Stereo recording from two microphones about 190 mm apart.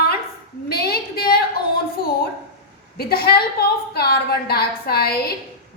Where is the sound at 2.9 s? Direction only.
55° left (ahead or behind).